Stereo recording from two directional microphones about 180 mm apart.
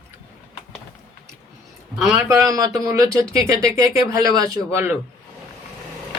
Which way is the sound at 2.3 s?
15° right (ahead or behind).